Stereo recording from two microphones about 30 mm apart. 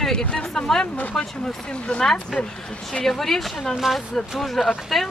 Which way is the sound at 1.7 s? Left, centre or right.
Left.